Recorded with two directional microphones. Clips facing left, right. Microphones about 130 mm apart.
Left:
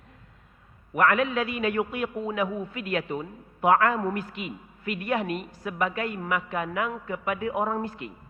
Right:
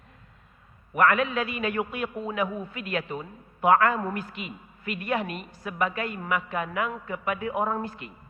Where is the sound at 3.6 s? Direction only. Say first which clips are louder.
Even; 25° left (ahead or behind).